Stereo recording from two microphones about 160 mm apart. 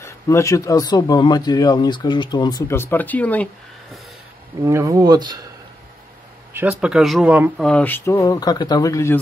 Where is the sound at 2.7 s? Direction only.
15° left (ahead or behind).